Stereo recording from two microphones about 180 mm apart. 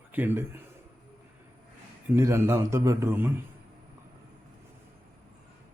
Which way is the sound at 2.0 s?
15° right (ahead or behind).